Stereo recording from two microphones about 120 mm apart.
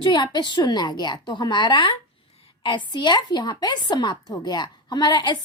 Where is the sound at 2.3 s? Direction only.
55° left (ahead or behind).